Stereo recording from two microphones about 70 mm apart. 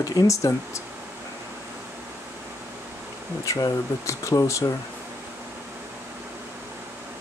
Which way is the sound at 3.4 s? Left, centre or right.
Left.